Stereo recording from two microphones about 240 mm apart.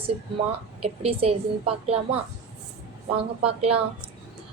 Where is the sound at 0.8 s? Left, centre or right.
Right.